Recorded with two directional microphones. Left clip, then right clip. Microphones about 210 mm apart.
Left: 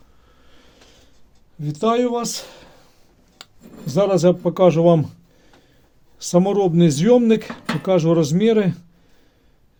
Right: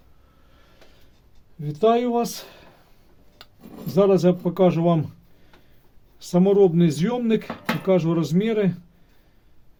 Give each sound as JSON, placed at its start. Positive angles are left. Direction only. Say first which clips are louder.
{"t": 1.6, "sound": "speech", "louder": "left 1 dB", "side_deg": 45}
{"t": 3.8, "sound": "speech", "louder": "left 2 dB", "side_deg": 40}
{"t": 6.1, "sound": "speech", "louder": "even", "side_deg": 45}